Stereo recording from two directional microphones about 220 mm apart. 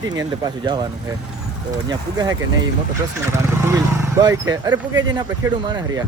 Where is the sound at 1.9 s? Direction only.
15° right (ahead or behind).